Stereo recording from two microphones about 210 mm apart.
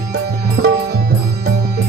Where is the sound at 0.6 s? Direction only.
55° right (ahead or behind).